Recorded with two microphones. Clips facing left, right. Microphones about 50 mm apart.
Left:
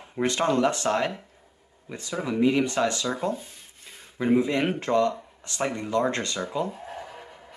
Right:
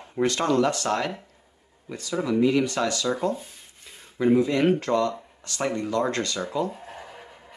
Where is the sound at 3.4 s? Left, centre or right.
Centre.